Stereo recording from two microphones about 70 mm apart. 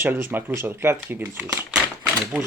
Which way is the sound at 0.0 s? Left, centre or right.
Right.